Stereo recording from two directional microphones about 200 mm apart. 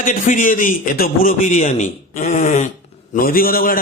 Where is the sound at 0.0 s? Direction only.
40° left (ahead or behind).